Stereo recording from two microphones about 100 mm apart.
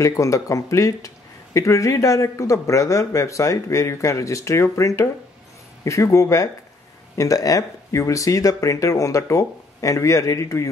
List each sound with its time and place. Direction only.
0.0 s speech: 35° left (ahead or behind)